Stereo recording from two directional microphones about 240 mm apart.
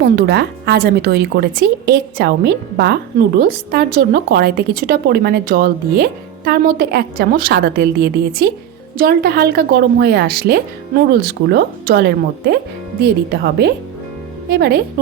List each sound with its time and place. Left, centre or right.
0.0 s a woman's voice: right